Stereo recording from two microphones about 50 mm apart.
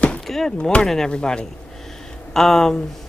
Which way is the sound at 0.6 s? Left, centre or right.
Centre.